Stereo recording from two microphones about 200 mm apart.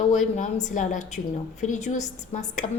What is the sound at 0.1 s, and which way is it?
A woman's voice, 35° left (ahead or behind).